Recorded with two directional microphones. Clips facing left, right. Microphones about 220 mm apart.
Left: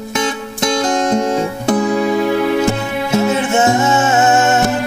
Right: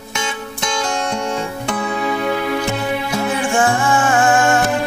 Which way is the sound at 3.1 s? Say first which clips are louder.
Left 8 dB; 25° left (ahead or behind).